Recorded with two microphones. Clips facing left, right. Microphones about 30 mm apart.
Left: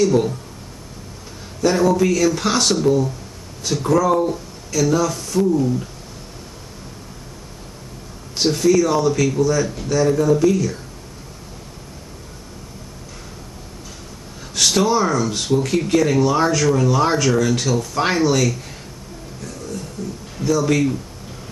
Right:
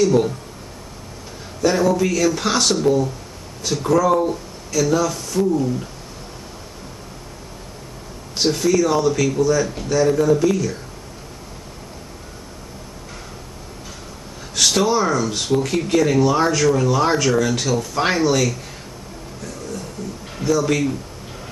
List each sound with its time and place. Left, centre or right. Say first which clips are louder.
0.0 s speech: even; centre
1.6 s speech: left 1 dB; centre
8.4 s speech: left 2 dB; centre
14.5 s speech: even; centre
20.0 s a sound: left 3 dB; centre
20.4 s speech: left 1 dB; centre